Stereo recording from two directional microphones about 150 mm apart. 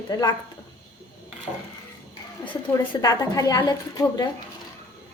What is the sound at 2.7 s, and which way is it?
A woman's voice, 25° left (ahead or behind).